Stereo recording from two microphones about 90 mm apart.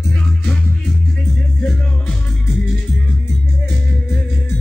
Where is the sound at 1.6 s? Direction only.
10° left (ahead or behind).